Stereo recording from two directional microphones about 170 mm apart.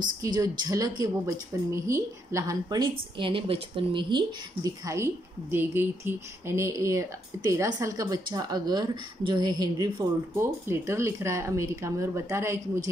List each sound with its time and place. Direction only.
0.2 s a woman's voice: 25° right (ahead or behind)
4.6 s a woman's voice: 15° right (ahead or behind)